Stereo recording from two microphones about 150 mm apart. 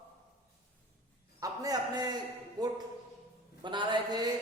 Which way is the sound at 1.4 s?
25° right (ahead or behind).